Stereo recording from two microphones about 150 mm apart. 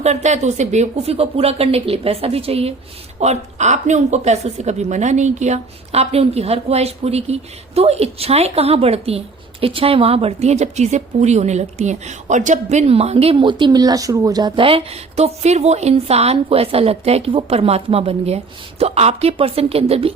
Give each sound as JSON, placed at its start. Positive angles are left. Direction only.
{"t": 0.0, "sound": "a woman's voice", "side_deg": -50}